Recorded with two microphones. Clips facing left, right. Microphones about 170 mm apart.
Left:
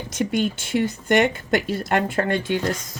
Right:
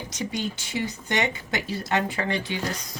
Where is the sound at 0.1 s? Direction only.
55° left (ahead or behind).